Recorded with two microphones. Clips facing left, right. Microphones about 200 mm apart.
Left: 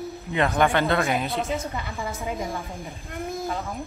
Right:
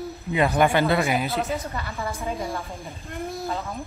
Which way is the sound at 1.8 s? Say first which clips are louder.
Right 1 dB; 15° left (ahead or behind).